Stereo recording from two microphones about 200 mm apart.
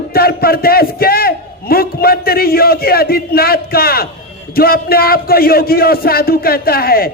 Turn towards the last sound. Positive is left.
turn(degrees=50)  # may be behind; listen again after turning